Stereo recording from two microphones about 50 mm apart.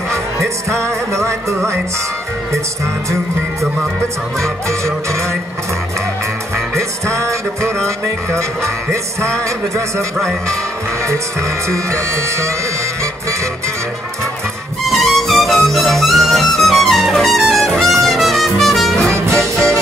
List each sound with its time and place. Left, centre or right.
0.1 s music: right
6.7 s music: right
14.9 s music: centre